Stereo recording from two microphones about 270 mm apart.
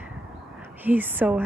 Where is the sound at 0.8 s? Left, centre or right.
Centre.